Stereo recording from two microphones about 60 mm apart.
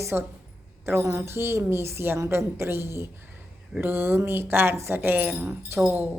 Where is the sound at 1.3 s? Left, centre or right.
Right.